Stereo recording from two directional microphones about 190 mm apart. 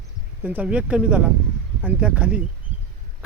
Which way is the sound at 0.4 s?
10° right (ahead or behind).